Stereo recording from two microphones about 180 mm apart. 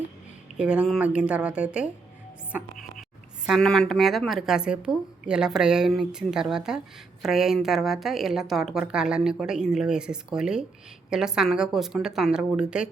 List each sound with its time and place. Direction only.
0.5 s a woman's voice: 5° right (ahead or behind)